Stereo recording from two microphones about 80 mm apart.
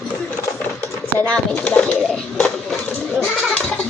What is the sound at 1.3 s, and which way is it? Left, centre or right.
Speech, centre.